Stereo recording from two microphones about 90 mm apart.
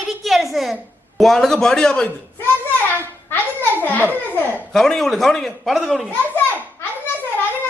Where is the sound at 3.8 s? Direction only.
20° left (ahead or behind).